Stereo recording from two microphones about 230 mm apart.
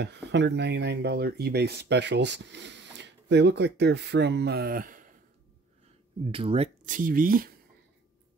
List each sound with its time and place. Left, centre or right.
0.0 s speech: right
6.2 s speech: right